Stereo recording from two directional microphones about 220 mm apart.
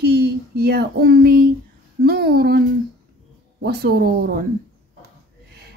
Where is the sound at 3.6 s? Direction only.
45° right (ahead or behind).